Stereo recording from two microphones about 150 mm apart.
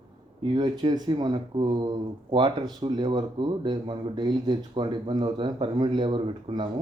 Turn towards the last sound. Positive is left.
turn(degrees=-35)  # may be behind; listen again after turning